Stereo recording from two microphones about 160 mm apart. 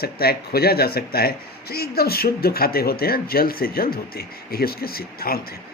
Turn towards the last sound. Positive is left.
turn(degrees=70)  # may be behind; listen again after turning